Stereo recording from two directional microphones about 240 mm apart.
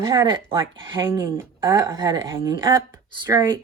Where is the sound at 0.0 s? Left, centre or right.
Centre.